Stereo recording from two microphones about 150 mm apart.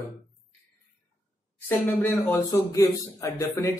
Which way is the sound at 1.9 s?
15° left (ahead or behind).